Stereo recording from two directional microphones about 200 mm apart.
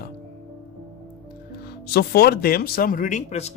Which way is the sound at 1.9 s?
50° left (ahead or behind).